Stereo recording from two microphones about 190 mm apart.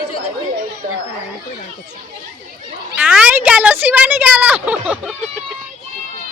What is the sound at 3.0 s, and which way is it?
A woman's voice, 5° right (ahead or behind).